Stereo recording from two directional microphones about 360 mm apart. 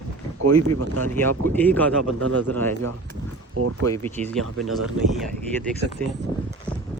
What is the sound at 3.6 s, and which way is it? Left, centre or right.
Speech, right.